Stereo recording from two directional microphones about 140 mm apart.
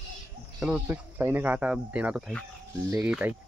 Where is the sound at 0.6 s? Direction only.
5° right (ahead or behind).